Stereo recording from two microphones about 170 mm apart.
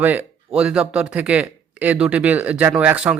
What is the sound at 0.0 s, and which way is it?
A man's voice, 10° right (ahead or behind).